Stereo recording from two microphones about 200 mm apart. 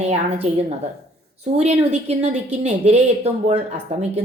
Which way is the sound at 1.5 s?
30° right (ahead or behind).